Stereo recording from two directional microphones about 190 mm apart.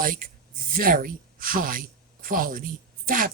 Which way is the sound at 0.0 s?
45° right (ahead or behind).